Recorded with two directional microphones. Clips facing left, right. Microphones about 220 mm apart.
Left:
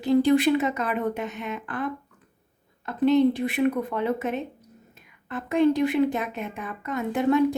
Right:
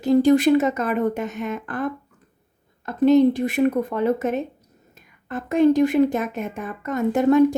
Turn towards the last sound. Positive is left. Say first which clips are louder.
# right 5 dB
turn(degrees=-45)  # may be behind; listen again after turning